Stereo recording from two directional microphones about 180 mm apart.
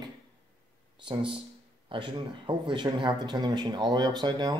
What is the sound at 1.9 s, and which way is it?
Speech, 25° right (ahead or behind).